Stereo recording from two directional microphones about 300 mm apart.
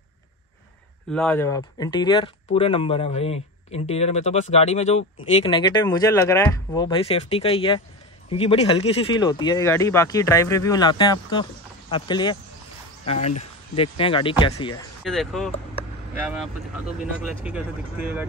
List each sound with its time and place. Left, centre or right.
1.1 s speech: centre
15.0 s speech: centre
17.0 s speech: centre